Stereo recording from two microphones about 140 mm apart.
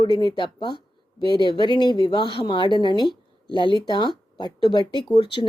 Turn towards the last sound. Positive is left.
turn(degrees=35)  # may be behind; listen again after turning